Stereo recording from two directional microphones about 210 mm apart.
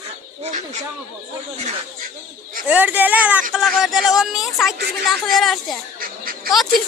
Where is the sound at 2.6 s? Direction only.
10° right (ahead or behind).